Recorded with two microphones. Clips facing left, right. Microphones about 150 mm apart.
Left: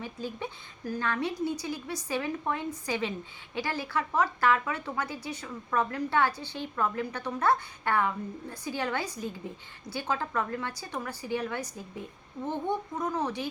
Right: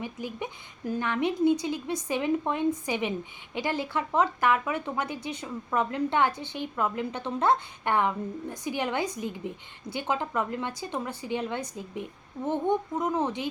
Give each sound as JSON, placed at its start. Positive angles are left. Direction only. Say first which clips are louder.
{"t": 0.0, "sound": "a woman's voice", "louder": "right 2 dB", "side_deg": -15}